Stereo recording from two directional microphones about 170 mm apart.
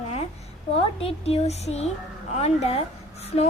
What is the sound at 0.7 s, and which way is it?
A woman's voice, 35° left (ahead or behind).